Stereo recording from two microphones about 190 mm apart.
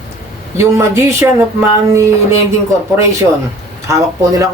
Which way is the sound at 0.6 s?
15° right (ahead or behind).